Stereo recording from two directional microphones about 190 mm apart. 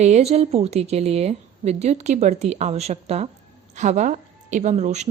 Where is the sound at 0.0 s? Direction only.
35° right (ahead or behind).